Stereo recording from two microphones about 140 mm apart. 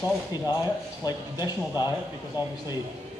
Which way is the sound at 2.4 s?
30° left (ahead or behind).